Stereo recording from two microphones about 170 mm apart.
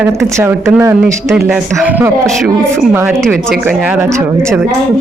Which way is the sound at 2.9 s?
15° right (ahead or behind).